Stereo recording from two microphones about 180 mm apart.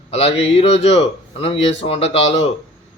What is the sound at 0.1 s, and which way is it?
A man's voice, 35° left (ahead or behind).